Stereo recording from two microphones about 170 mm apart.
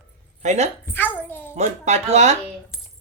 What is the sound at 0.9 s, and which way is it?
Speech, 10° left (ahead or behind).